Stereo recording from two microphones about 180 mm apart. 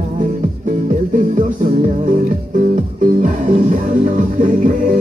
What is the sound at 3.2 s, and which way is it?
Music, 40° right (ahead or behind).